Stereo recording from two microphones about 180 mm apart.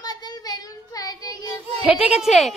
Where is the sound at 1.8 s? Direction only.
5° right (ahead or behind).